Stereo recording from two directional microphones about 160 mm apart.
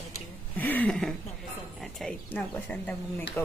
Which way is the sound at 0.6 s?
10° left (ahead or behind).